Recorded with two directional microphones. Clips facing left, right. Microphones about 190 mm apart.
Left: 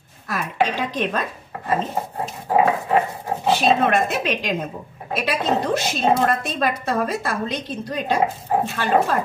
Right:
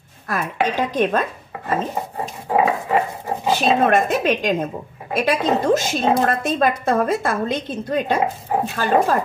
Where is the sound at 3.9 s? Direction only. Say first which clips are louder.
Right 4 dB; 50° right (ahead or behind).